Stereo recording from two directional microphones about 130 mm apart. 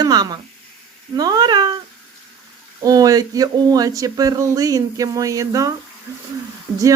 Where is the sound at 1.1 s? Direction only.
30° right (ahead or behind).